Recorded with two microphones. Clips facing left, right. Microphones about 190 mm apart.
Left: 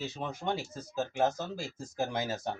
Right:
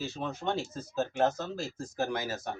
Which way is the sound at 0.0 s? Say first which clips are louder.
Right 2 dB; 15° left (ahead or behind).